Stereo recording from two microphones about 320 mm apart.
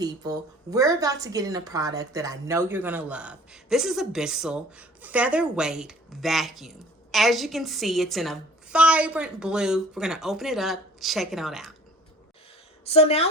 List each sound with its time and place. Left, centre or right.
0.0 s a woman's voice: centre
12.8 s a woman's voice: centre